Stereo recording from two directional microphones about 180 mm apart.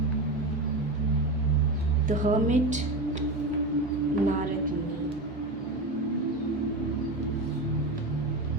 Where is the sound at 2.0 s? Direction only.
45° right (ahead or behind).